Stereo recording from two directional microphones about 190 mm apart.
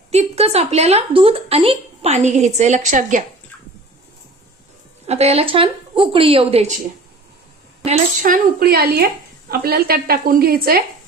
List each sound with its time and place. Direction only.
0.1 s a woman's voice: 35° right (ahead or behind)
5.0 s a woman's voice: 35° right (ahead or behind)
7.9 s a woman's voice: 45° right (ahead or behind)